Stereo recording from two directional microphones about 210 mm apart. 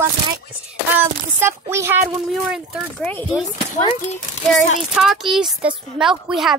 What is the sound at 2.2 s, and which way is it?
Speech, centre (ahead or behind).